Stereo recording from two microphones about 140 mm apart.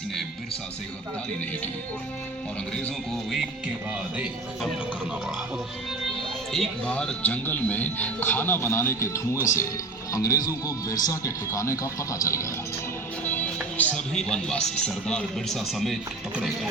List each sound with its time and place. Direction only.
2.8 s speech: centre (ahead or behind)
6.5 s speech: 5° left (ahead or behind); by 12.5 s 20° left (ahead or behind)
13.2 s speech: 10° left (ahead or behind)